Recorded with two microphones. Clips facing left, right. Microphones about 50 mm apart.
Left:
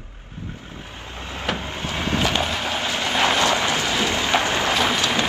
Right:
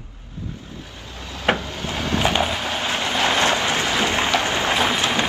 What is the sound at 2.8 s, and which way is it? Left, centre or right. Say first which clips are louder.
Vehicle: right 1 dB; right.